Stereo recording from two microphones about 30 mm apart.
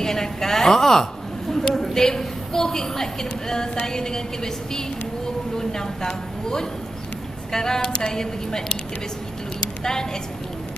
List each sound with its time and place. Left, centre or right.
0.0 s a woman's voice: centre
5.6 s speech: centre
9.6 s a sound: left